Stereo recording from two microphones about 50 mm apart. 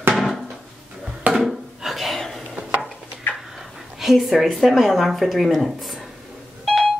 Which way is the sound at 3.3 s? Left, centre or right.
Left.